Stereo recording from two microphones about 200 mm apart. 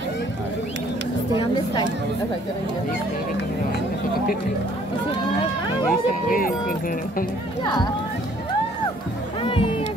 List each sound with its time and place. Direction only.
5.9 s speech: 45° left (ahead or behind)
7.6 s speech: 20° left (ahead or behind)
9.4 s speech: 25° left (ahead or behind)